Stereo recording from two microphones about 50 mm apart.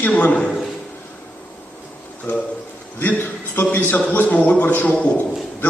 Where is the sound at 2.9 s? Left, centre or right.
Left.